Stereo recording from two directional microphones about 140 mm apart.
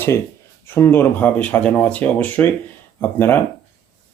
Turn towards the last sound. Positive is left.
turn(degrees=15)  # may be behind; listen again after turning